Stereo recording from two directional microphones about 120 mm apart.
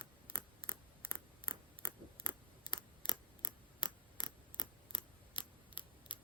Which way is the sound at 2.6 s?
40° left (ahead or behind).